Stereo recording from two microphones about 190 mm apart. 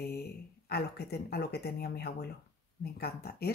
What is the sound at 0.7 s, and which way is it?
Speech, 55° left (ahead or behind).